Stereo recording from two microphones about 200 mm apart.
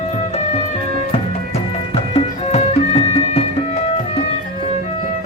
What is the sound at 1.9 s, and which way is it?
Music, 30° left (ahead or behind).